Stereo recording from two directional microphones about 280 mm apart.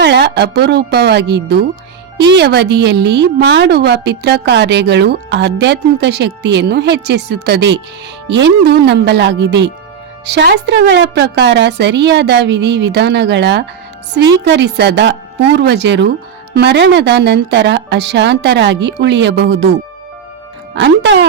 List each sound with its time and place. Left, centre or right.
0.0 s a woman's voice: right
20.7 s a woman's voice: right